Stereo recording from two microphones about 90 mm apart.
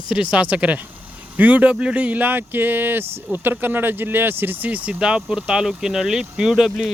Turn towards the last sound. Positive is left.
turn(degrees=-5)  # may be behind; listen again after turning